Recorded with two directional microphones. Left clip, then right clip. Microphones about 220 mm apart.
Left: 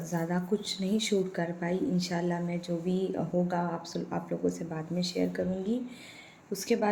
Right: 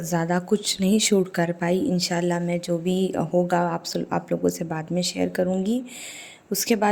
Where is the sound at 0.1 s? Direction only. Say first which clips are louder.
Right 9 dB; 50° right (ahead or behind).